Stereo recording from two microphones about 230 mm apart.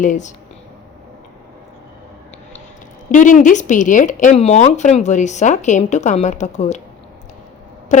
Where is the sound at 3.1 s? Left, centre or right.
Left.